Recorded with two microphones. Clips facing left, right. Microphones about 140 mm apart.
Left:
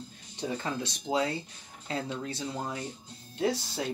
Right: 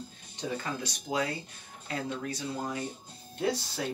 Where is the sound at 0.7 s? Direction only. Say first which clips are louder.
Left 3 dB; 25° left (ahead or behind).